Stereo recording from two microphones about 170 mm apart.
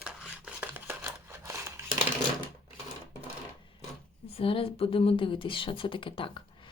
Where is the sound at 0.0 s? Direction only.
5° right (ahead or behind).